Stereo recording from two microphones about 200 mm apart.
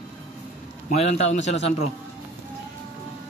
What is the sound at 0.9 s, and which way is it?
Speech, 35° left (ahead or behind).